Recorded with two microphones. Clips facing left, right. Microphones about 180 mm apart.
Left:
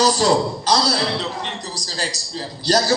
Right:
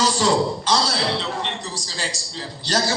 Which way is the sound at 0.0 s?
40° left (ahead or behind).